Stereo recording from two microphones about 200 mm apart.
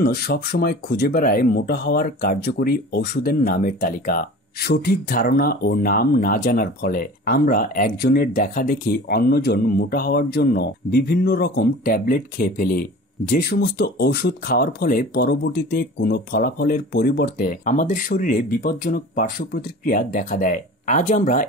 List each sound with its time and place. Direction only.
0.0 s speech: 50° left (ahead or behind)